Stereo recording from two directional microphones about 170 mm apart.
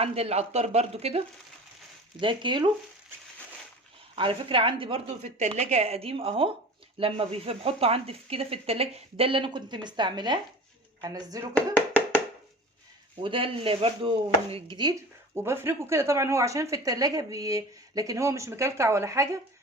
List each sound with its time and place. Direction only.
0.0 s speech: 35° right (ahead or behind)
4.1 s speech: 30° right (ahead or behind)
13.2 s speech: 30° right (ahead or behind)